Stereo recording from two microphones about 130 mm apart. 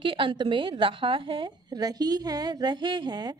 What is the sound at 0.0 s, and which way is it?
A woman's voice, 40° right (ahead or behind).